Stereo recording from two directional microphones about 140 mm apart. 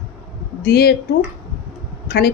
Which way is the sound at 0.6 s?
90° left.